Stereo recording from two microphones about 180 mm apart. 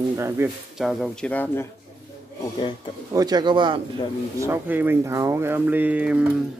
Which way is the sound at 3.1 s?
20° right (ahead or behind).